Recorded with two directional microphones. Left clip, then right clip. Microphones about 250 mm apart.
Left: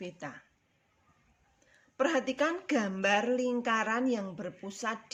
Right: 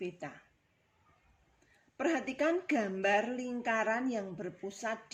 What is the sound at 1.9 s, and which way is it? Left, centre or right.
Speech, left.